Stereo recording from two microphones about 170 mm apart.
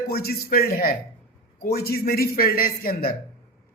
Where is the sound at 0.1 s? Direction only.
65° left (ahead or behind).